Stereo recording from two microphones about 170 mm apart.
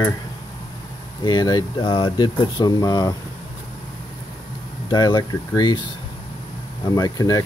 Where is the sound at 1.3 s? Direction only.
25° left (ahead or behind).